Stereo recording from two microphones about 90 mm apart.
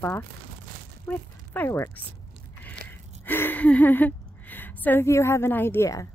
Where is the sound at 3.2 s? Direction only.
25° left (ahead or behind).